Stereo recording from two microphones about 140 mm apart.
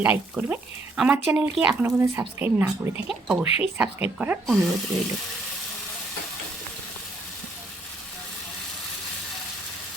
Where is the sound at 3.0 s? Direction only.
Centre (ahead or behind).